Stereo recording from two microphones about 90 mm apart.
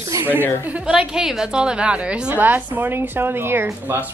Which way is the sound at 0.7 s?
10° right (ahead or behind).